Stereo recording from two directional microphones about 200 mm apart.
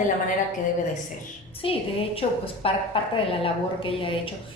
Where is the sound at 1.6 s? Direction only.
30° left (ahead or behind).